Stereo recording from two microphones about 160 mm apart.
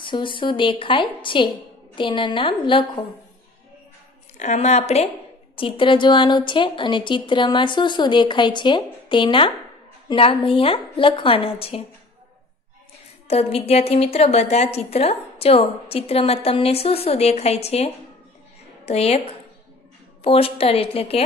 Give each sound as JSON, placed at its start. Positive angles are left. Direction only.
{"t": 0.0, "sound": "a woman's voice", "side_deg": 30}
{"t": 4.4, "sound": "a woman's voice", "side_deg": 45}
{"t": 13.3, "sound": "a woman's voice", "side_deg": 40}
{"t": 18.9, "sound": "a woman's voice", "side_deg": 40}
{"t": 20.2, "sound": "a woman's voice", "side_deg": 35}